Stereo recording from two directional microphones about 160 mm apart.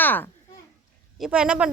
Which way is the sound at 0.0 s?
10° left (ahead or behind).